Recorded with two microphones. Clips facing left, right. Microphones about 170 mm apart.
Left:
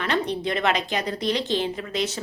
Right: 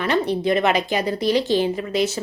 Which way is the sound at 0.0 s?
5° right (ahead or behind).